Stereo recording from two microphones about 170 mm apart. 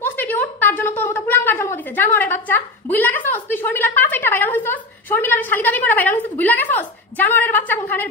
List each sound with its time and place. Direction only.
0.0 s a woman's voice: 10° left (ahead or behind)